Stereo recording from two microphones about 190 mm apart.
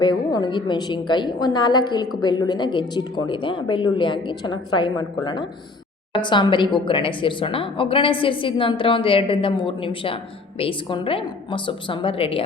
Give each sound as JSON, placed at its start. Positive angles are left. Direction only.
{"t": 0.0, "sound": "a woman's voice", "side_deg": 20}